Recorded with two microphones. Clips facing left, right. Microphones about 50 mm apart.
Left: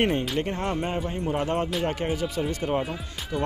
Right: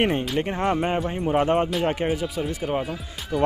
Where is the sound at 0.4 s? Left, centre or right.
Right.